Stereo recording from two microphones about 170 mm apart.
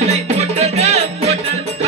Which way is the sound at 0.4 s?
40° right (ahead or behind).